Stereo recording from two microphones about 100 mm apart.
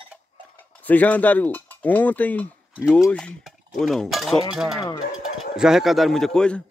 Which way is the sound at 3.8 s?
5° left (ahead or behind).